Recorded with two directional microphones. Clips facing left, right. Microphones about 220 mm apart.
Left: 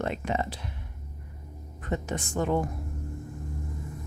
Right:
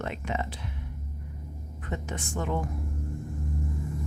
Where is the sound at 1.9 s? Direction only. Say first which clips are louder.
Left 4 dB; 35° left (ahead or behind).